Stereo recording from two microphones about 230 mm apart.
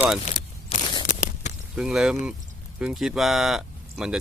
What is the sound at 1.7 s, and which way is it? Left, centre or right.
Speech, centre.